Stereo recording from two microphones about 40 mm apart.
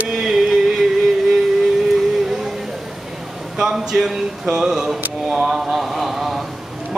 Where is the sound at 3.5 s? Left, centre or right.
Centre.